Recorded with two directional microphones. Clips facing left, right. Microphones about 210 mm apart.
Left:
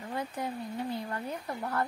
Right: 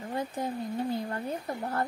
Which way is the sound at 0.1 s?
25° right (ahead or behind).